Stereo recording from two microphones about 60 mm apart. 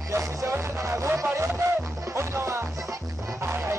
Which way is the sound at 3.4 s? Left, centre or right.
Right.